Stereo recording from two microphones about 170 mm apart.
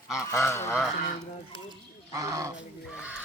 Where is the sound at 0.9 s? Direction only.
45° left (ahead or behind).